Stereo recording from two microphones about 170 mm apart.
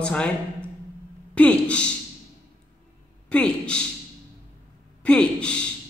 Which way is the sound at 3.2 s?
5° left (ahead or behind).